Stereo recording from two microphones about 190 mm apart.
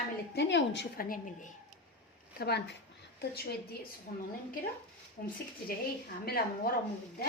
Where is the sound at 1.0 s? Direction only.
45° left (ahead or behind).